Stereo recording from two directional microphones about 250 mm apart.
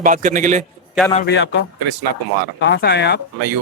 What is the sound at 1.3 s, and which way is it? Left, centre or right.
Speech, left.